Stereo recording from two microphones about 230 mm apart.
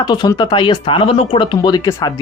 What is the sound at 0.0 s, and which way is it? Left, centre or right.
Speech, centre.